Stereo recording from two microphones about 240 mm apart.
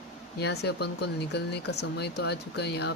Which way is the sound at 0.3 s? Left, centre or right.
Left.